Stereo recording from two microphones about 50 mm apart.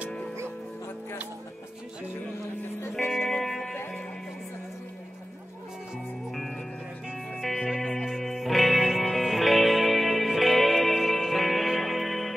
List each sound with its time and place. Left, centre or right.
3.2 s music: centre
7.3 s music: centre